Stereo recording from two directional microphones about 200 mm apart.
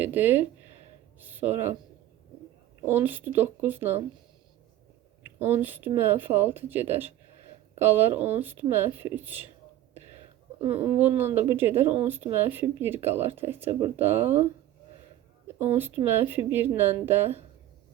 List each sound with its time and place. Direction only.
0.0 s speech: 10° right (ahead or behind)
2.8 s speech: 10° right (ahead or behind)
5.4 s speech: 10° right (ahead or behind)
10.6 s speech: 10° right (ahead or behind)
15.5 s speech: 10° right (ahead or behind)